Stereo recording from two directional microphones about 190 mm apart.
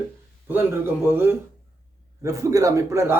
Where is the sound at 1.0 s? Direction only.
10° right (ahead or behind).